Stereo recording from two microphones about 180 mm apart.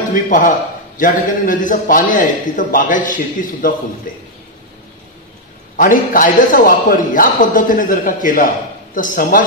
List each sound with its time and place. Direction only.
0.1 s a man's voice: 45° left (ahead or behind)
5.8 s a man's voice: 50° left (ahead or behind)